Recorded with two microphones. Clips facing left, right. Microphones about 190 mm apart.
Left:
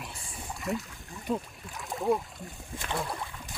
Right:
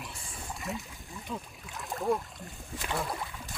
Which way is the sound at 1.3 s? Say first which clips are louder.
Left 8 dB; 35° left (ahead or behind).